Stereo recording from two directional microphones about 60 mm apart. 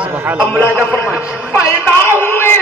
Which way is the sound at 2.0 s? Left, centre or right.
Left.